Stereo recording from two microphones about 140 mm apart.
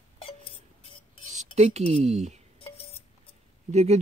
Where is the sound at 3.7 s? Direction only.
50° right (ahead or behind).